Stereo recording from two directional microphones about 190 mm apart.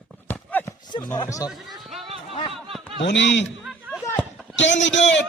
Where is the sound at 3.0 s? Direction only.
65° left (ahead or behind).